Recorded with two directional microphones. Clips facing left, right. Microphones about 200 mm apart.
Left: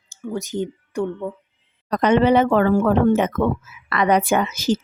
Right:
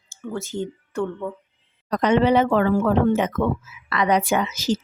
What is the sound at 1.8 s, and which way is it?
Speech, 55° left (ahead or behind).